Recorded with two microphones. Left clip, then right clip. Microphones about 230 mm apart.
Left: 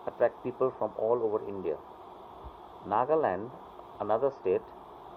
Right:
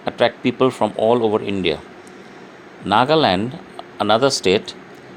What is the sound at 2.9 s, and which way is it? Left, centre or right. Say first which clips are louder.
Speech: right 12 dB; right.